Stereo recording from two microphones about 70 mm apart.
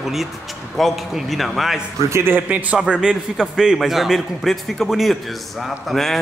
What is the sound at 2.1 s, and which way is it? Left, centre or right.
Speech, right.